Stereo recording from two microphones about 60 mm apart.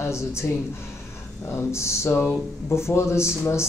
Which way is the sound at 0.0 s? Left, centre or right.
Left.